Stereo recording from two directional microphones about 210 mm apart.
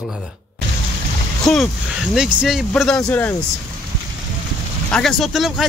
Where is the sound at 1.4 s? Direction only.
Centre (ahead or behind).